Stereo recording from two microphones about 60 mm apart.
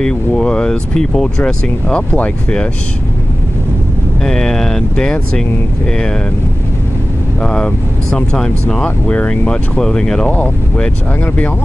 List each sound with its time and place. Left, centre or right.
0.0 s speech: centre
4.2 s speech: centre
7.4 s speech: centre
9.8 s speech: centre